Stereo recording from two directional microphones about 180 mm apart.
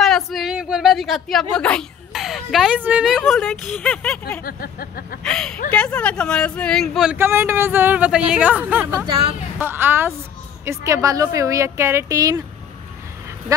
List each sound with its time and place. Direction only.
0.0 s speech: centre (ahead or behind)
4.4 s speech: 55° left (ahead or behind)
5.2 s speech: centre (ahead or behind)
7.2 s speech: 15° right (ahead or behind)
9.0 s speech: 30° right (ahead or behind)
9.6 s speech: 10° right (ahead or behind)